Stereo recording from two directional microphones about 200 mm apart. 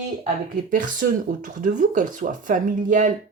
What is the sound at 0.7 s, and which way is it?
Speech, 40° right (ahead or behind).